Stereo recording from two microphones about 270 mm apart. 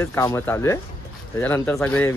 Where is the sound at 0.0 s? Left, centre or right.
Centre.